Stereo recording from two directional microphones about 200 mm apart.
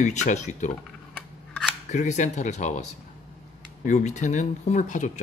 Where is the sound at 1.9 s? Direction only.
35° left (ahead or behind).